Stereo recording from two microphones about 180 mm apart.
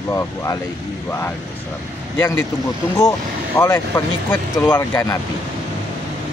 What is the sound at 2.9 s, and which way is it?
Speech, 15° left (ahead or behind).